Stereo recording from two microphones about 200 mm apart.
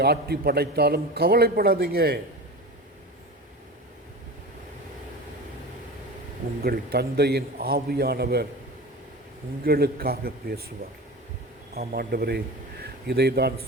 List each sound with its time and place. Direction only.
0.0 s a man's voice: 50° right (ahead or behind)
6.6 s a man's voice: 50° right (ahead or behind)
9.6 s a man's voice: 50° right (ahead or behind)
11.7 s a man's voice: 50° right (ahead or behind)